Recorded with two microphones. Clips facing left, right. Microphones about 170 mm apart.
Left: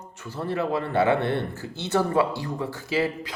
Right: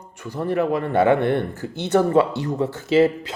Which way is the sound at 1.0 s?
15° right (ahead or behind).